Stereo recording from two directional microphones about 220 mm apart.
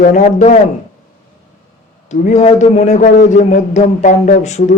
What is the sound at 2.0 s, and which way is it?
A man's voice, 30° left (ahead or behind).